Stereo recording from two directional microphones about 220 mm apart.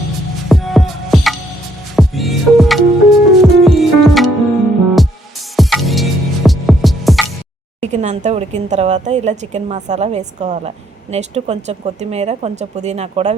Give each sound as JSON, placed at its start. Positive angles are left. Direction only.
{"t": 0.4, "sound": "music", "side_deg": 0}
{"t": 5.5, "sound": "music", "side_deg": 0}
{"t": 7.8, "sound": "a woman's voice", "side_deg": -30}